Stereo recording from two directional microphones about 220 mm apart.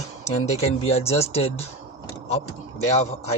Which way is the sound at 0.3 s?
30° left (ahead or behind).